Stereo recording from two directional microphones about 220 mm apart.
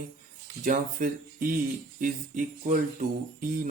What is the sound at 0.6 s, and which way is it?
Speech, 40° right (ahead or behind).